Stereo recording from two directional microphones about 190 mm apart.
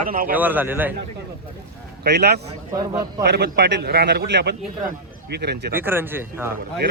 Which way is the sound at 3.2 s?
60° right (ahead or behind).